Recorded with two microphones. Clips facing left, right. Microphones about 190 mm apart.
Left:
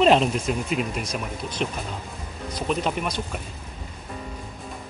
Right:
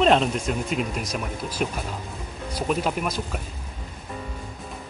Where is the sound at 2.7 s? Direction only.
5° right (ahead or behind).